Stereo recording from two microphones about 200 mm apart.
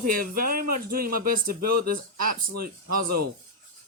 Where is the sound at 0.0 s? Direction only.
45° right (ahead or behind).